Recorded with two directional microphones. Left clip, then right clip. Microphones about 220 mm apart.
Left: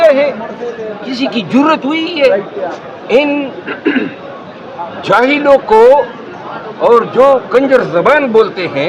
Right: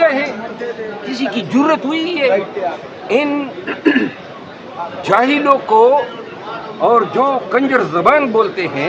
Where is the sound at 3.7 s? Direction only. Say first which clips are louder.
Right 1 dB; 40° right (ahead or behind).